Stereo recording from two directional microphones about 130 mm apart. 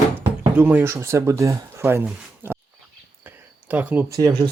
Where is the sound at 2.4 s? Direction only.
15° right (ahead or behind).